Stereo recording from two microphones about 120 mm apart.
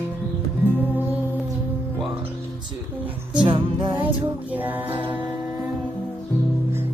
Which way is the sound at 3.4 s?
40° right (ahead or behind).